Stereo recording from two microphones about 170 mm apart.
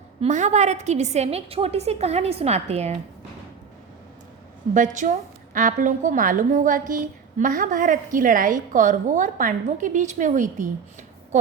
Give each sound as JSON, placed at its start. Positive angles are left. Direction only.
{"t": 0.2, "sound": "a woman's voice", "side_deg": -45}
{"t": 4.7, "sound": "a woman's voice", "side_deg": -50}